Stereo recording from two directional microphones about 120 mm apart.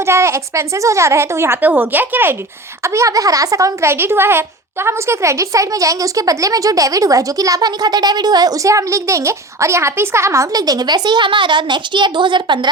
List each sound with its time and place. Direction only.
0.0 s speech: 20° right (ahead or behind); by 12.5 s 40° right (ahead or behind)